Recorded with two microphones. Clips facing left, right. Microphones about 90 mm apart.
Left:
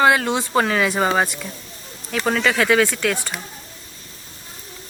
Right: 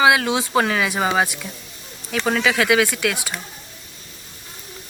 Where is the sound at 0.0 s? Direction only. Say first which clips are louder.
Even; 5° right (ahead or behind).